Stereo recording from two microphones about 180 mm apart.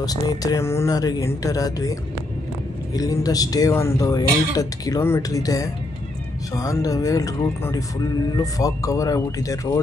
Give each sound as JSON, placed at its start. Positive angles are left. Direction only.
{"t": 0.0, "sound": "speech", "side_deg": 20}
{"t": 3.0, "sound": "speech", "side_deg": 20}